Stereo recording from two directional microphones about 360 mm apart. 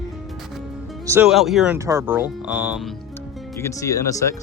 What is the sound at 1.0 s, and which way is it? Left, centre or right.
Speech, centre.